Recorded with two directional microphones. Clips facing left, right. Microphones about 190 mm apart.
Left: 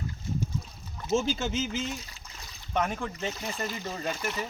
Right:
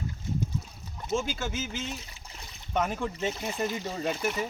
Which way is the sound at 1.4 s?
20° left (ahead or behind).